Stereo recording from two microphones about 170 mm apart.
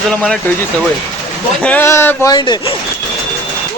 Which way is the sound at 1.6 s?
10° left (ahead or behind).